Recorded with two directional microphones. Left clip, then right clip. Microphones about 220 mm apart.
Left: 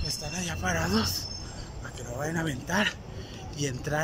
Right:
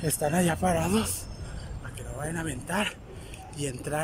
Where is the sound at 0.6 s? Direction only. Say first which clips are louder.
Right 2 dB; 15° right (ahead or behind).